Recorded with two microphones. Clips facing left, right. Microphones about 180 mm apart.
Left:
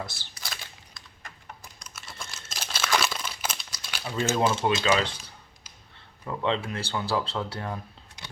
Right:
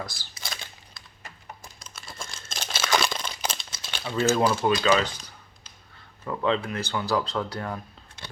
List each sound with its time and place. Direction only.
0.0 s speech: 25° left (ahead or behind)
0.3 s a sound: centre (ahead or behind)
2.0 s crumpling: centre (ahead or behind)
3.2 s crumpling: 30° right (ahead or behind)
4.4 s speech: 20° left (ahead or behind)
6.2 s speech: 25° left (ahead or behind)